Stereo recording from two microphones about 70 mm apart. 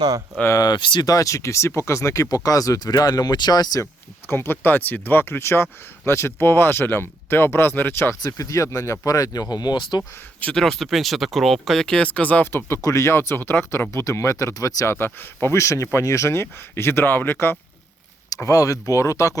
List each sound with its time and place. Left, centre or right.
0.5 s speech: left
2.3 s speech: left
4.3 s speech: left
8.2 s speech: left
10.5 s speech: centre
12.5 s speech: left
12.8 s speech: left
13.1 s speech: left
13.9 s speech: left
14.8 s speech: left
18.4 s speech: left